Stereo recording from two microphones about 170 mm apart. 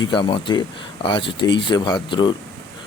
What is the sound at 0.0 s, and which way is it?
Speech, 30° left (ahead or behind).